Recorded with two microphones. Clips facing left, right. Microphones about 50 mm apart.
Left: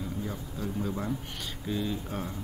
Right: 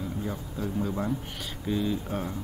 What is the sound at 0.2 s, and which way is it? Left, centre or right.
A man's voice, centre.